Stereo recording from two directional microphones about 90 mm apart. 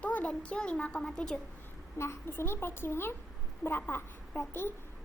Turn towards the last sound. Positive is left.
turn(degrees=25)  # may be behind; listen again after turning